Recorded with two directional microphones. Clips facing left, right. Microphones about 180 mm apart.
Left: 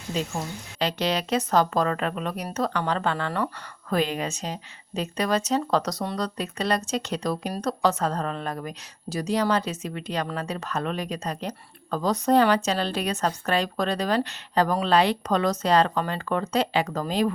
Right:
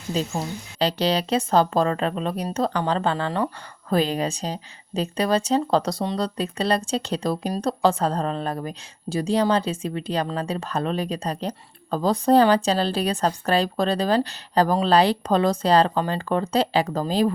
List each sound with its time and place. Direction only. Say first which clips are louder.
0.1 s a woman's voice: right 3 dB; 35° right (ahead or behind)